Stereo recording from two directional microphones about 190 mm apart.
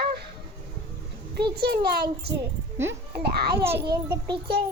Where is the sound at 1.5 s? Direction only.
55° right (ahead or behind).